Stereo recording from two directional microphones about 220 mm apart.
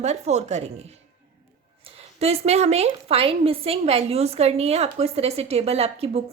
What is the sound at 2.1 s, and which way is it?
A woman's voice, 30° right (ahead or behind).